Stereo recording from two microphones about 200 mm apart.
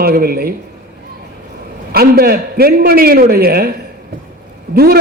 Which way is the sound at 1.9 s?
50° right (ahead or behind).